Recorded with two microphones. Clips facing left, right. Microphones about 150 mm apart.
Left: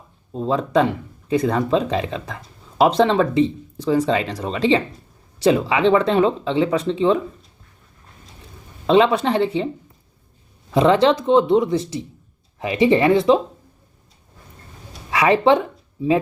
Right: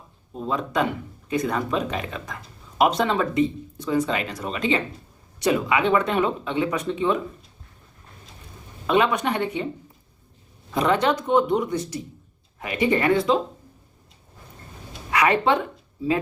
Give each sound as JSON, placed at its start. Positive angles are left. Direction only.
{"t": 0.3, "sound": "speech", "side_deg": 30}
{"t": 8.9, "sound": "speech", "side_deg": 30}
{"t": 10.8, "sound": "speech", "side_deg": 30}
{"t": 15.1, "sound": "speech", "side_deg": 25}